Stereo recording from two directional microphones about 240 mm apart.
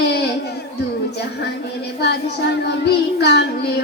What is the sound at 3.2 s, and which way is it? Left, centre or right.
Child singing, left.